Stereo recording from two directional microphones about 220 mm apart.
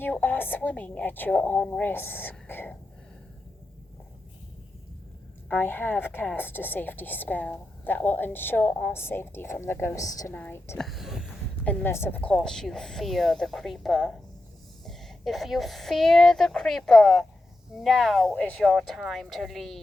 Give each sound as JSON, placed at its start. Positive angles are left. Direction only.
{"t": 0.0, "sound": "a woman's voice", "side_deg": 10}
{"t": 5.5, "sound": "a woman's voice", "side_deg": 10}